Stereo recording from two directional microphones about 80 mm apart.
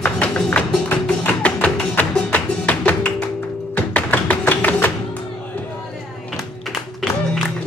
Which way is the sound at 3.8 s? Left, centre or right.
Centre.